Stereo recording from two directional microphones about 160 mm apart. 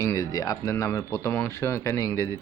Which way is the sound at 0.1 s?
20° left (ahead or behind).